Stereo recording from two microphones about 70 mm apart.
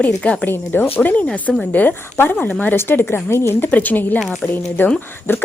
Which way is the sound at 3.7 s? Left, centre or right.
Left.